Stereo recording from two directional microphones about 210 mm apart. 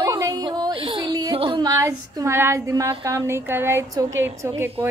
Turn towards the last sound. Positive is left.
turn(degrees=-10)  # may be behind; listen again after turning